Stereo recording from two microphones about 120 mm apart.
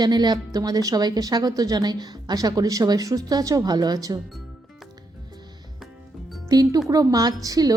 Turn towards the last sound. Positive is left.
turn(degrees=-30)  # may be behind; listen again after turning